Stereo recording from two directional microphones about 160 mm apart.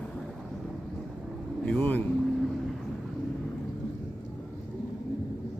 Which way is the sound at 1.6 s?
10° left (ahead or behind).